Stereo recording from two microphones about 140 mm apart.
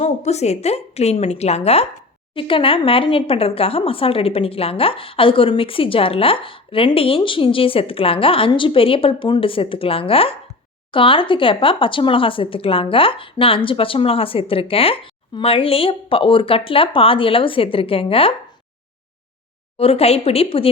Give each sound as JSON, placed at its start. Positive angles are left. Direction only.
{"t": 0.0, "sound": "a woman's voice", "side_deg": 50}
{"t": 19.7, "sound": "a woman's voice", "side_deg": 45}